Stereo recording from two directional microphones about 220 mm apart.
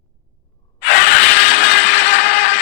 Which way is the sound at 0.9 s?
45° left (ahead or behind).